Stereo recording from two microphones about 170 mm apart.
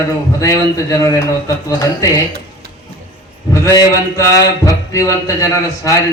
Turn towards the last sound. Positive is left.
turn(degrees=20)  # may be behind; listen again after turning